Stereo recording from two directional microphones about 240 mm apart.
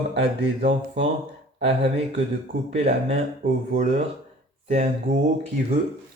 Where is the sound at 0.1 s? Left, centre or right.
Right.